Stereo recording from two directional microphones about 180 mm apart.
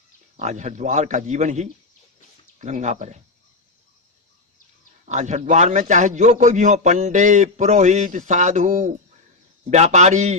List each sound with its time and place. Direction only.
0.3 s a man's voice: 40° right (ahead or behind)
5.0 s a man's voice: 40° right (ahead or behind)